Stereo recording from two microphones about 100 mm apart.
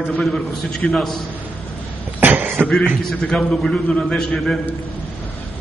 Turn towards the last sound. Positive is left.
turn(degrees=5)  # may be behind; listen again after turning